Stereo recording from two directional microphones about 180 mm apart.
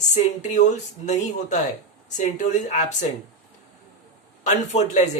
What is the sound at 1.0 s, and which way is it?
Speech, 40° left (ahead or behind).